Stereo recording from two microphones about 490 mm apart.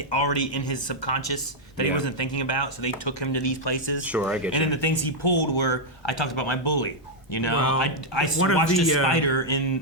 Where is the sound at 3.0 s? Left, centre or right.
Left.